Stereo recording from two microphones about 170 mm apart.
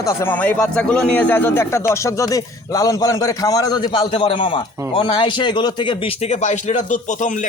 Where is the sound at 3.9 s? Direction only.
35° left (ahead or behind).